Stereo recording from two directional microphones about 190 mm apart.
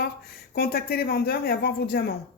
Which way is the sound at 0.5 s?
55° left (ahead or behind).